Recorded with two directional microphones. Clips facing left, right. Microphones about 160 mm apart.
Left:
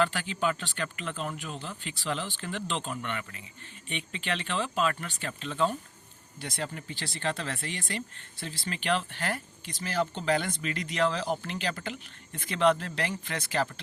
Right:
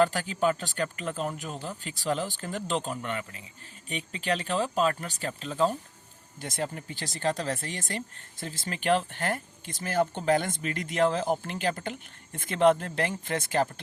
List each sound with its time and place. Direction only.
0.0 s speech: 40° right (ahead or behind)